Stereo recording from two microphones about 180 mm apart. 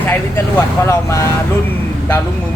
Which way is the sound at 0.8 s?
15° left (ahead or behind).